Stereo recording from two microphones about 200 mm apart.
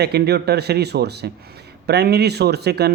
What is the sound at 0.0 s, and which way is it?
A man's voice, 55° right (ahead or behind).